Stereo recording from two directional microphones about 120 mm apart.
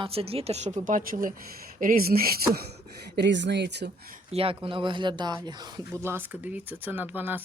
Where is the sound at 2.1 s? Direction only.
90° right.